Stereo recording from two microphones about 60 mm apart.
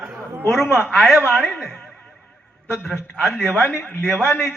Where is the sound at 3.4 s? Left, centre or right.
Left.